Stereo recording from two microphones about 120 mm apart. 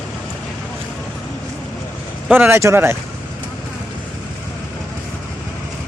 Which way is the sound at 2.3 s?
20° right (ahead or behind).